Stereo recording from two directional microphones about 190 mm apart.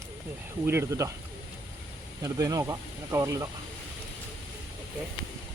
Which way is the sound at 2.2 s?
15° right (ahead or behind).